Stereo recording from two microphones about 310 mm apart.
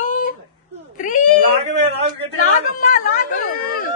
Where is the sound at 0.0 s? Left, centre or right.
Left.